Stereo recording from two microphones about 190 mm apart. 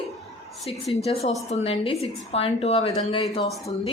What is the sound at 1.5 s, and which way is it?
Speech, 35° left (ahead or behind).